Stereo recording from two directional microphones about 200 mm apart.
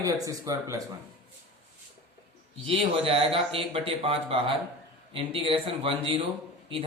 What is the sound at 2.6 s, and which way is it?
Speech, 30° right (ahead or behind).